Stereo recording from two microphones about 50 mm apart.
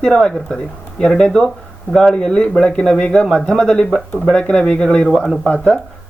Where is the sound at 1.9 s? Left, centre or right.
Left.